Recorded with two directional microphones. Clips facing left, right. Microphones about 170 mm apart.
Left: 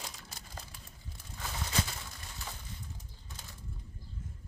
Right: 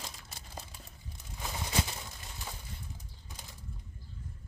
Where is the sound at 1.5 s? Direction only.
15° right (ahead or behind).